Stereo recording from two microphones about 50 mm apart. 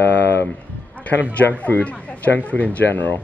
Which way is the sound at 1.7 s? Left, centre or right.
Left.